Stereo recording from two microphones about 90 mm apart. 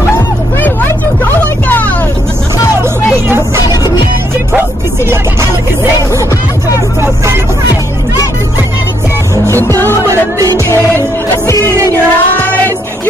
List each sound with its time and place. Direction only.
0.6 s a sound: 20° left (ahead or behind)
3.3 s vehicle: 30° right (ahead or behind)
9.6 s music: 25° left (ahead or behind)
10.0 s music: 40° right (ahead or behind)
11.9 s music: 20° left (ahead or behind)